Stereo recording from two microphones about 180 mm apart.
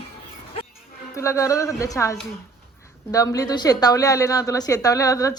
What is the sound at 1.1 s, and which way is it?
A woman's voice, 15° left (ahead or behind).